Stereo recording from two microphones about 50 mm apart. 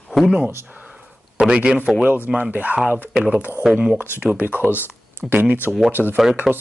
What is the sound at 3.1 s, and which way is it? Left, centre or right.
Speech, centre.